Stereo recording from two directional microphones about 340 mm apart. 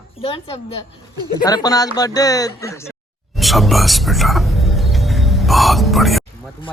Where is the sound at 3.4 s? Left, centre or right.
Centre.